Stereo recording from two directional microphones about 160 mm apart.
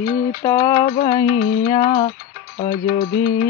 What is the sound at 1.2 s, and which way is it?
Music, 90° left.